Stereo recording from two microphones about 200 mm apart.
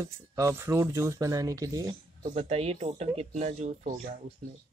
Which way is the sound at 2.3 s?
30° right (ahead or behind).